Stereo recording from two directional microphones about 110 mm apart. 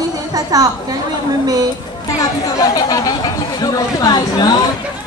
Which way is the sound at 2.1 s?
35° left (ahead or behind).